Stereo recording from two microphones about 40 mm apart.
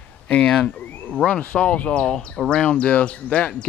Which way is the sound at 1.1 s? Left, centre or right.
Left.